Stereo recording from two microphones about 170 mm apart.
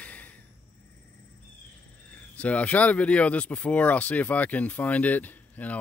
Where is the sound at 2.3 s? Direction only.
10° left (ahead or behind).